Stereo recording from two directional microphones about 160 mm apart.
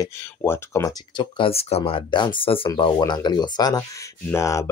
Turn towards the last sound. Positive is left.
turn(degrees=20)  # may be behind; listen again after turning